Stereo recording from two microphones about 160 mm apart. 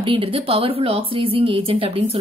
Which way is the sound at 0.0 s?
35° right (ahead or behind).